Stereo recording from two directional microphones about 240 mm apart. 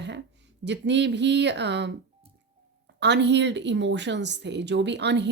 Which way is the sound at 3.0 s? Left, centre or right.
Right.